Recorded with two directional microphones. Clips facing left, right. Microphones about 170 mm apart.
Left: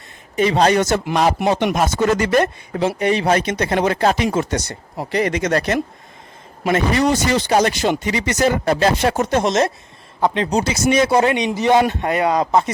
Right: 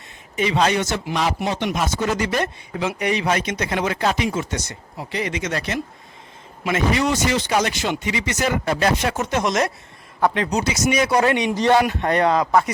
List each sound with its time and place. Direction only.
0.3 s speech: 40° left (ahead or behind)
2.7 s a man's voice: 30° left (ahead or behind)
11.5 s a man's voice: 10° left (ahead or behind)